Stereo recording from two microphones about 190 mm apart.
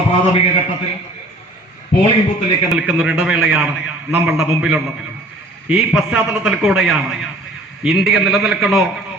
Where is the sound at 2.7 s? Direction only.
5° right (ahead or behind).